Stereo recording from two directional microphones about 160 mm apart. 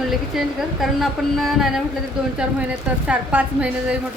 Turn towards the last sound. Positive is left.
turn(degrees=-10)  # may be behind; listen again after turning